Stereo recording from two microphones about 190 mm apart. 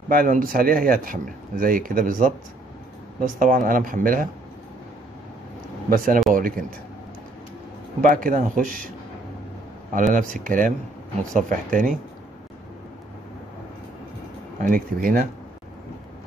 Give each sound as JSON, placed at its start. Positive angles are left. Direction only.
{"t": 0.1, "sound": "speech", "side_deg": -50}
{"t": 5.9, "sound": "speech", "side_deg": -50}
{"t": 8.0, "sound": "speech", "side_deg": -45}
{"t": 9.9, "sound": "speech", "side_deg": -45}
{"t": 14.6, "sound": "speech", "side_deg": -50}